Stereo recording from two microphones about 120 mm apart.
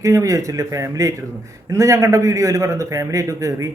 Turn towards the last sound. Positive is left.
turn(degrees=-25)  # may be behind; listen again after turning